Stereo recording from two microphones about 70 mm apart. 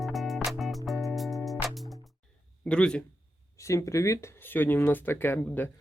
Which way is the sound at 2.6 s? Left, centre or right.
Centre.